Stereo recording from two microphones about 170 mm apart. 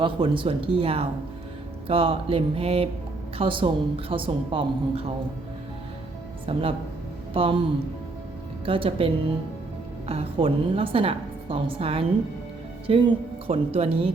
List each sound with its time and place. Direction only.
0.0 s a woman's voice: 30° right (ahead or behind)
6.4 s a woman's voice: 35° right (ahead or behind)
8.6 s a woman's voice: 30° right (ahead or behind)